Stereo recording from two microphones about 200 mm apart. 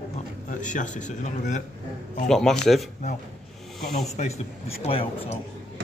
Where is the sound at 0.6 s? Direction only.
40° left (ahead or behind).